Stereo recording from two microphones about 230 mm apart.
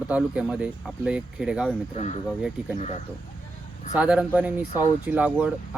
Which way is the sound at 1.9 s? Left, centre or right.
Left.